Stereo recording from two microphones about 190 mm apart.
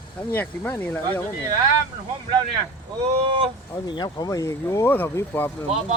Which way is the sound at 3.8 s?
25° left (ahead or behind).